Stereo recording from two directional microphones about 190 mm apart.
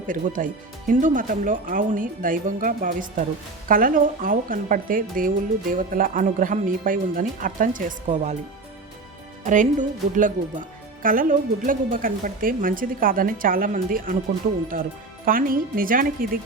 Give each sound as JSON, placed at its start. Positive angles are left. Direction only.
{"t": 0.1, "sound": "a woman's voice", "side_deg": -45}
{"t": 9.4, "sound": "a woman's voice", "side_deg": -40}